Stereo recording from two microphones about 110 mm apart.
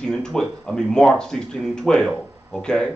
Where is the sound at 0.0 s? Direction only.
5° left (ahead or behind).